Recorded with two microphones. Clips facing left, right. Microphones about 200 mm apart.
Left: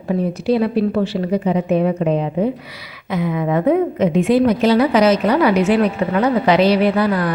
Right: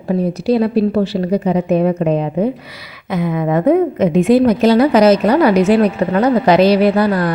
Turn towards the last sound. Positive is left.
turn(degrees=-40)  # may be behind; listen again after turning